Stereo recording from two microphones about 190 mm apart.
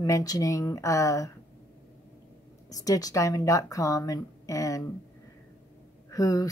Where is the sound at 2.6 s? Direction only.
20° left (ahead or behind).